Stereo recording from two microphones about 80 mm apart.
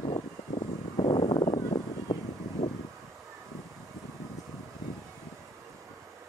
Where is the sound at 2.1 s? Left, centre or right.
Left.